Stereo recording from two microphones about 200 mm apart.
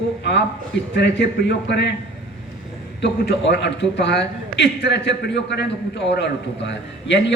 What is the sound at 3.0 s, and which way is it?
A man's voice, 60° left (ahead or behind).